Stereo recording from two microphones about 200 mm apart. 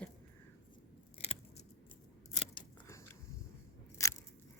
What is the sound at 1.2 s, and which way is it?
Scissors, 35° left (ahead or behind).